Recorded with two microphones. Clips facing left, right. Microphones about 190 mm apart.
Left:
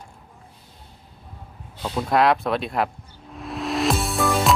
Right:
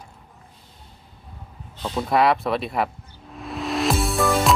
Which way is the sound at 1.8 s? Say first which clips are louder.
Even; centre (ahead or behind).